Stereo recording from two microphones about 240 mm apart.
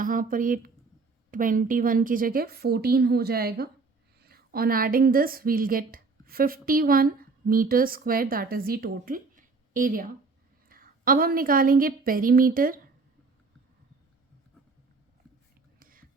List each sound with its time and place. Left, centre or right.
0.0 s a woman's voice: right
15.8 s whispering: right